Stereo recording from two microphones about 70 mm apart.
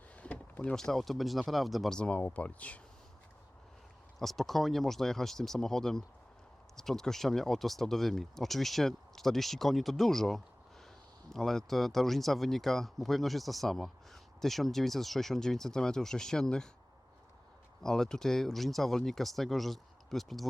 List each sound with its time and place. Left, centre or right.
0.2 s speech: centre
2.0 s speech: centre
4.2 s speech: centre
17.8 s speech: centre